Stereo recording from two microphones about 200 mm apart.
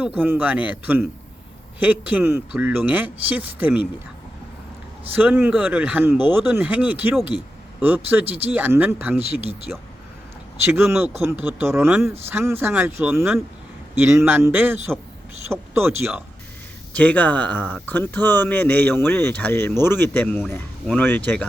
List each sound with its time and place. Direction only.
0.2 s speech: 10° right (ahead or behind)
5.1 s speech: 10° right (ahead or behind)
8.2 s speech: 30° right (ahead or behind)
8.4 s speech: 10° right (ahead or behind)
9.3 s speech: 30° right (ahead or behind)
10.7 s speech: 10° right (ahead or behind)
16.9 s speech: 5° left (ahead or behind)